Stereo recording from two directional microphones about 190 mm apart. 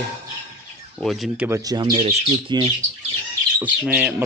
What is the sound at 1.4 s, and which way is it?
Speech, 15° right (ahead or behind).